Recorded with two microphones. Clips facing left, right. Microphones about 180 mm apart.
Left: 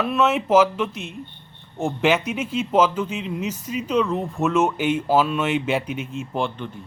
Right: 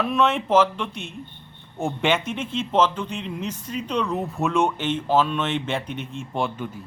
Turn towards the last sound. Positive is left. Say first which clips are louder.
# left 1 dB
turn(degrees=0)  # may be behind; listen again after turning